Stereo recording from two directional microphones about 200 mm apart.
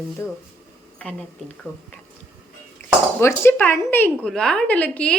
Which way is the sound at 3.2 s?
10° left (ahead or behind).